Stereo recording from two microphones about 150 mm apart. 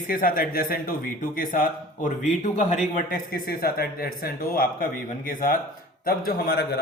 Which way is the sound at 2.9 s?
65° left (ahead or behind).